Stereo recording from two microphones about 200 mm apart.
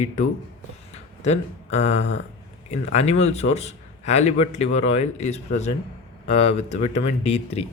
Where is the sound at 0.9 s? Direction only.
35° left (ahead or behind).